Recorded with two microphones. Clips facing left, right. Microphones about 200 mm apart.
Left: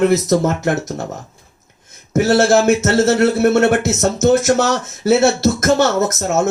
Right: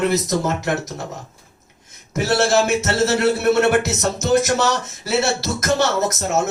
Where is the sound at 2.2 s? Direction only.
50° left (ahead or behind).